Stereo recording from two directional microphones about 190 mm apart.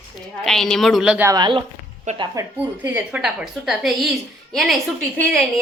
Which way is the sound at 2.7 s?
10° right (ahead or behind).